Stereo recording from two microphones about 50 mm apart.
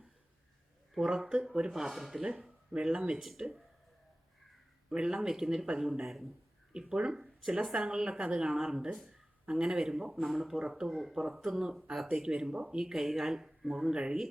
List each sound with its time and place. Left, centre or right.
0.9 s speech: centre
1.7 s speech: centre
2.2 s speech: centre
3.2 s speech: centre
4.9 s speech: centre
11.0 s speech: centre
13.9 s speech: centre